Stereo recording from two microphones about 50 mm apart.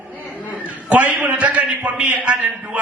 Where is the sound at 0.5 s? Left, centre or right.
Right.